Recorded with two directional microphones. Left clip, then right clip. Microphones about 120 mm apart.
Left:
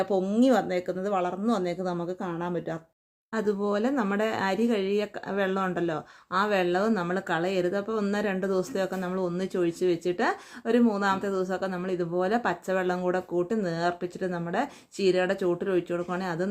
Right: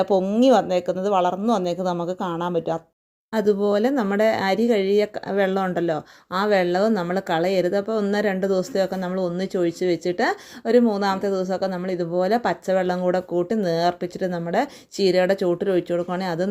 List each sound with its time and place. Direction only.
0.0 s speech: 35° right (ahead or behind)